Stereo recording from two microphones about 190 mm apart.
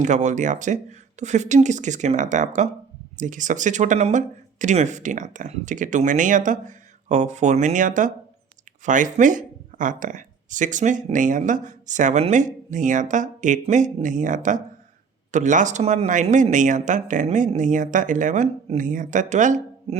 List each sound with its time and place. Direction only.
0.0 s speech: 40° right (ahead or behind)